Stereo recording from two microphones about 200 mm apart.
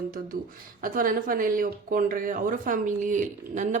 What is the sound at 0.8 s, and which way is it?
Speech, 45° right (ahead or behind).